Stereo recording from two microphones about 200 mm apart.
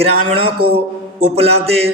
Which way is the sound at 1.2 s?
30° right (ahead or behind).